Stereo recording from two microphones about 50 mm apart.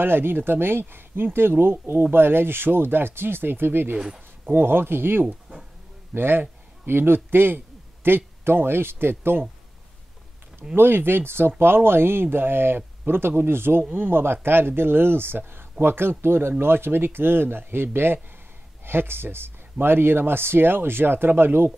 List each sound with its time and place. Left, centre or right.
0.0 s speech: right
5.2 s a sound: centre
6.1 s speech: right
7.2 s a sound: right
8.5 s speech: right
10.8 s speech: right
13.8 s speech: right